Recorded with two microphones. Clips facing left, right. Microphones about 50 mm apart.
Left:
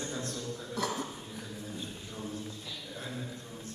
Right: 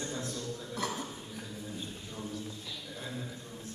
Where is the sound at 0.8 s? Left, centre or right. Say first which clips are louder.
Left 2 dB; right.